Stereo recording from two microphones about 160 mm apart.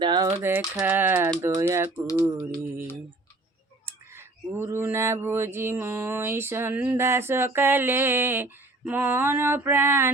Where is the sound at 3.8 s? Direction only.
15° right (ahead or behind).